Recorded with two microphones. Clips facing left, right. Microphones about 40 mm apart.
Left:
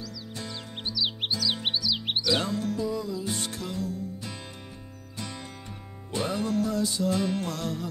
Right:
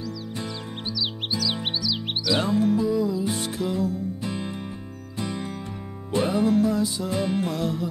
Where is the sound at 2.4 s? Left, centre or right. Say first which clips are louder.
Right 7 dB; centre.